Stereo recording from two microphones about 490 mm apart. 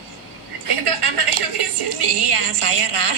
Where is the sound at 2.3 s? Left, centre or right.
Right.